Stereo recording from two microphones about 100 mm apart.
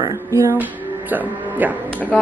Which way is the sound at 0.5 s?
15° right (ahead or behind).